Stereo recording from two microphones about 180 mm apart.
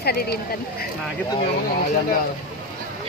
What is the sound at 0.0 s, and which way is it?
Speech, 60° left (ahead or behind).